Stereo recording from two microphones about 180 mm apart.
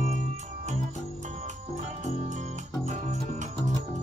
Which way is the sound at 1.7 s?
40° right (ahead or behind).